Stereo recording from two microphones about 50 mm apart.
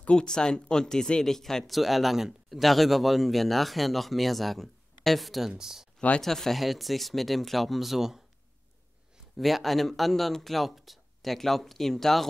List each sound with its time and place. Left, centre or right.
0.1 s speech: centre
5.5 s speech: centre
6.2 s speech: centre
9.4 s speech: centre